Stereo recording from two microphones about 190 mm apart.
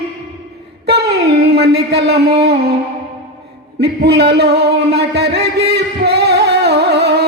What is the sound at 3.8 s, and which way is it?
Music, 60° right (ahead or behind).